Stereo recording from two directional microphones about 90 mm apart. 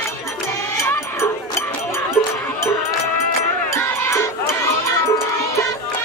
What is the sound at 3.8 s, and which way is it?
Music, 30° left (ahead or behind).